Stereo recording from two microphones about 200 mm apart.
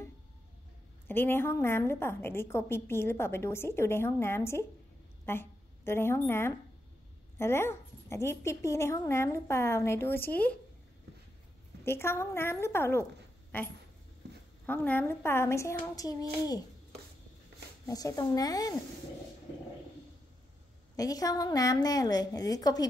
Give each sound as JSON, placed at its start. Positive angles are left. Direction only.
{"t": 1.0, "sound": "a woman's voice", "side_deg": 10}
{"t": 11.8, "sound": "a woman's voice", "side_deg": 10}
{"t": 17.8, "sound": "a woman's voice", "side_deg": 15}
{"t": 20.9, "sound": "a woman's voice", "side_deg": 20}